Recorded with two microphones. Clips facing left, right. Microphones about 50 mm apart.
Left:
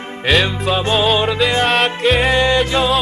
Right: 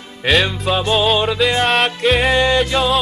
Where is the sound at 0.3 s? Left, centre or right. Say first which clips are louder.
Even; centre.